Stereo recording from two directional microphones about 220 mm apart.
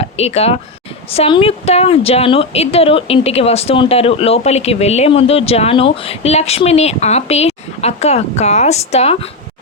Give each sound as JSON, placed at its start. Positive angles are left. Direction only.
{"t": 0.0, "sound": "a woman's voice", "side_deg": 30}